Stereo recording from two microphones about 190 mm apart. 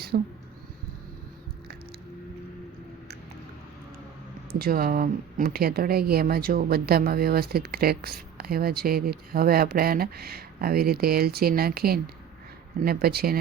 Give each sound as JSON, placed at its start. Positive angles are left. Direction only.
{"t": 0.1, "sound": "a woman's voice", "side_deg": -50}
{"t": 4.5, "sound": "a woman's voice", "side_deg": -55}